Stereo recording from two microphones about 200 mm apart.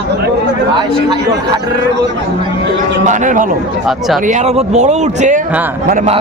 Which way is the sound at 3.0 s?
40° right (ahead or behind).